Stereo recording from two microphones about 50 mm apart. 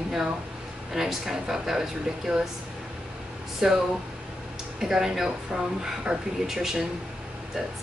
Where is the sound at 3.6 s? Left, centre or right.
Centre.